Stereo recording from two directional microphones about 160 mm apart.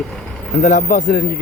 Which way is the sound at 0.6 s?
50° left (ahead or behind).